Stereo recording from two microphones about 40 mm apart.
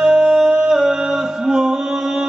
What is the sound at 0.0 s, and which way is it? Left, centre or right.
Music, right.